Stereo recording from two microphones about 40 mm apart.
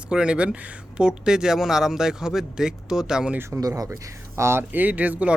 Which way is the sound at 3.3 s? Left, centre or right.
Right.